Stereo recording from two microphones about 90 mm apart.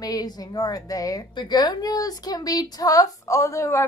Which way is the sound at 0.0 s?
45° left (ahead or behind).